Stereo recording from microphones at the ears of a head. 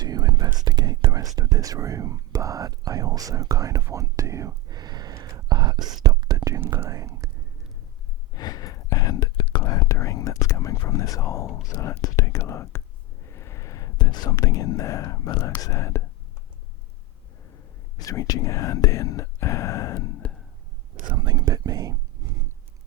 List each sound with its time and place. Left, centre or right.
0.0 s whispering: right
8.3 s whispering: left
17.5 s whispering: left
20.9 s whispering: right